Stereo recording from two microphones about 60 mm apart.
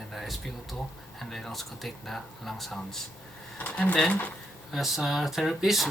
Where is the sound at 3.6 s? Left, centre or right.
Left.